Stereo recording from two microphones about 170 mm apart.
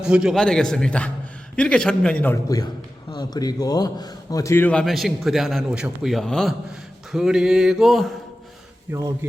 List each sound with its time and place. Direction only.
0.0 s a man's voice: 5° right (ahead or behind)
8.9 s speech: 20° right (ahead or behind)